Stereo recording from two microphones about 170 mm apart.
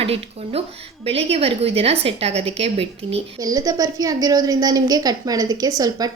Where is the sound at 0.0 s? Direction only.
35° right (ahead or behind).